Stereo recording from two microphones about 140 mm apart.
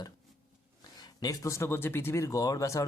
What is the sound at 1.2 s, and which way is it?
Speech, 25° left (ahead or behind).